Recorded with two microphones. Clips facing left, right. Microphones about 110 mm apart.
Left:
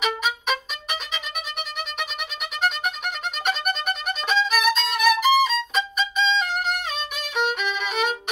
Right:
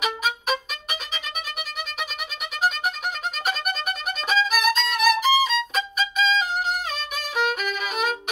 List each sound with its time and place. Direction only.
0.0 s violin: centre (ahead or behind)
3.4 s violin: centre (ahead or behind)